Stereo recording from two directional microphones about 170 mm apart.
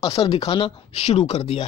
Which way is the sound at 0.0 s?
20° left (ahead or behind).